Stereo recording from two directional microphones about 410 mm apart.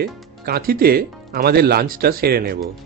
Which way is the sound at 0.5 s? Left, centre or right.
Right.